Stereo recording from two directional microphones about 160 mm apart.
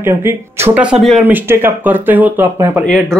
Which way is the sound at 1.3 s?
15° right (ahead or behind).